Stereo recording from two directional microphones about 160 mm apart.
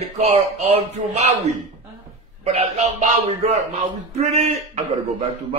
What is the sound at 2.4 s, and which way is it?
A man's voice, 40° right (ahead or behind).